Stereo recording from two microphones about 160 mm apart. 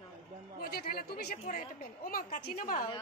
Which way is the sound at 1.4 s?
60° left (ahead or behind).